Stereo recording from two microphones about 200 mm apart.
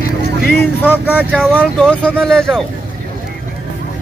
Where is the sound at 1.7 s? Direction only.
5° left (ahead or behind).